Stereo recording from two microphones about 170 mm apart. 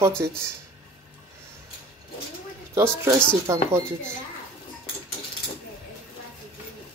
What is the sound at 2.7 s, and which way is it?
Speech, 15° right (ahead or behind).